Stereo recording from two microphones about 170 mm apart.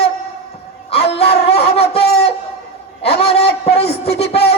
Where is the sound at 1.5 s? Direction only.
35° left (ahead or behind).